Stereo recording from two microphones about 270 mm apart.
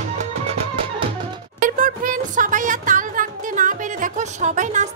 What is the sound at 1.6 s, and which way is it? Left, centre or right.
Music, right.